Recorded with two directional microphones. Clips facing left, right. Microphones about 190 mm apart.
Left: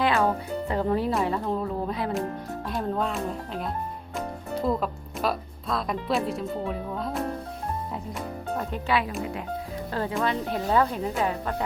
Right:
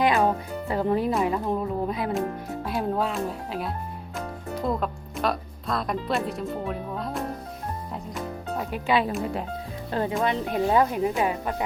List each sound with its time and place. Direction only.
0.0 s music: 15° right (ahead or behind)
0.7 s speech: 15° right (ahead or behind)
9.9 s speech: 20° right (ahead or behind)